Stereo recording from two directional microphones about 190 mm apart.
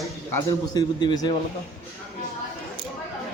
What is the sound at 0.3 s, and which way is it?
A man's voice, 15° left (ahead or behind).